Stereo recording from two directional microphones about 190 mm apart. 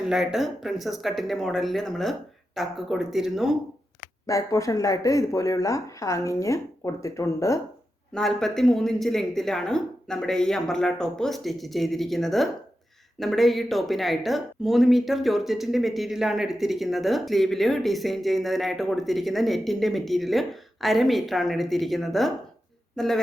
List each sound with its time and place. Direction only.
0.1 s speech: centre (ahead or behind)
4.3 s speech: 15° left (ahead or behind)
8.1 s speech: centre (ahead or behind)